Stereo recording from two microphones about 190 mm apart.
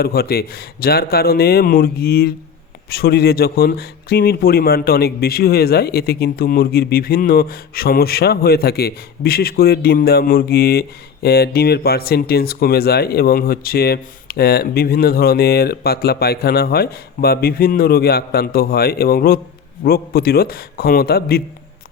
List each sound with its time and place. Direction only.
0.0 s speech: 55° left (ahead or behind)